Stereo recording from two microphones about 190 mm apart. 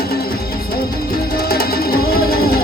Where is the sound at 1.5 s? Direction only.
50° left (ahead or behind).